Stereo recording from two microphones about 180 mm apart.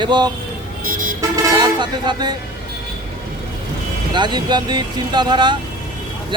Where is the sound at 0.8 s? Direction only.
50° right (ahead or behind).